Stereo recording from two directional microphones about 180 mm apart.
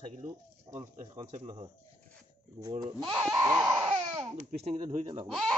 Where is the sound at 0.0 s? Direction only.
20° right (ahead or behind).